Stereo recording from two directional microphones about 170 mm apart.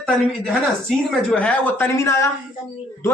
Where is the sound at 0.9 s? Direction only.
5° left (ahead or behind).